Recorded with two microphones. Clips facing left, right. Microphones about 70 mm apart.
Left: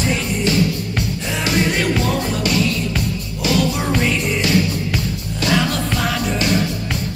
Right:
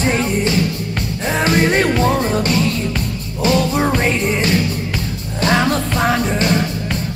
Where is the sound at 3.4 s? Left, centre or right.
Right.